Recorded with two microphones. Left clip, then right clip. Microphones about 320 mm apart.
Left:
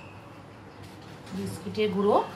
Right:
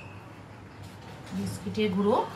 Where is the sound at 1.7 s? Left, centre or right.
Left.